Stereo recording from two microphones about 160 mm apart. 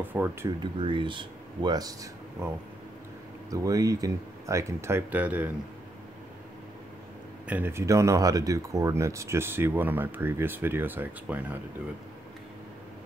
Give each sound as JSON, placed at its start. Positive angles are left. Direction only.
{"t": 0.0, "sound": "speech", "side_deg": -10}
{"t": 0.6, "sound": "speech", "side_deg": -30}
{"t": 7.4, "sound": "speech", "side_deg": -10}